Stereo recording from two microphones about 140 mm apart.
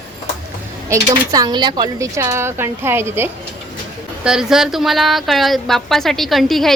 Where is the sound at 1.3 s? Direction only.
30° right (ahead or behind).